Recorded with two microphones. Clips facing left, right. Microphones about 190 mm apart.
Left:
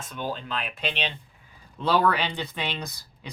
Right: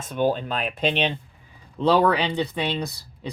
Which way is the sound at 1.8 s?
15° right (ahead or behind).